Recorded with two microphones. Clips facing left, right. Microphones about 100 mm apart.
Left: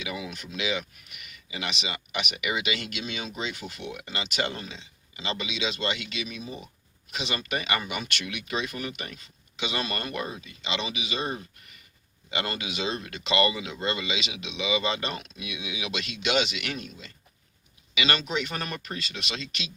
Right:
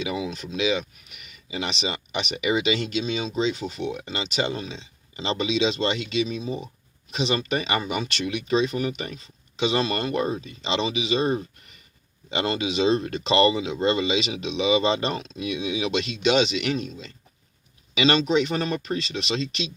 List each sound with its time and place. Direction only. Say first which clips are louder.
0.0 s speech: right 7 dB; 25° right (ahead or behind)